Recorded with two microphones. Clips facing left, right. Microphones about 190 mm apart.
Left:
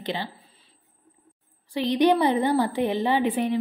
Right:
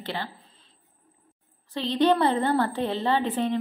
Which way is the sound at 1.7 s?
15° left (ahead or behind).